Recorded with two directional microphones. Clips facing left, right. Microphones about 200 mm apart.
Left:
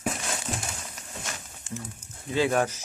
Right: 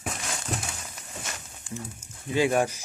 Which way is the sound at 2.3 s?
15° right (ahead or behind).